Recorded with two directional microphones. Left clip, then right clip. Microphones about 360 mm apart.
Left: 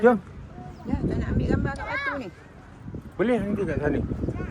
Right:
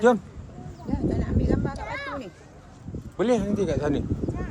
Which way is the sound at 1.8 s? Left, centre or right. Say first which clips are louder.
Left 4 dB; right.